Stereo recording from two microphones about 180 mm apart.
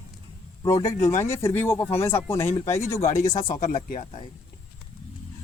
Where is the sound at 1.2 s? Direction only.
15° left (ahead or behind).